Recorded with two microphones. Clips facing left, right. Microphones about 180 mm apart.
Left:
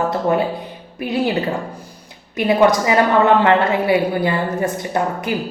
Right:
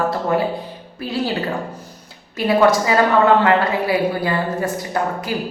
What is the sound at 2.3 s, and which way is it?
A woman's voice, 20° left (ahead or behind).